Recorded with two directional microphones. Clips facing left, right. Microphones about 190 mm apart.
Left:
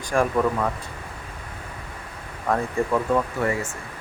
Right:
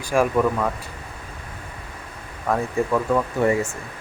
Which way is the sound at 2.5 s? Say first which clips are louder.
Right 1 dB; centre (ahead or behind).